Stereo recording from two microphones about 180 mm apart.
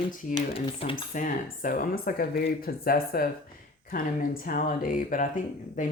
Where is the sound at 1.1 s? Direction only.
45° left (ahead or behind).